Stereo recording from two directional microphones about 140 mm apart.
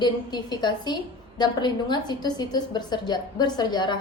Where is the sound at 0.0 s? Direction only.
30° left (ahead or behind).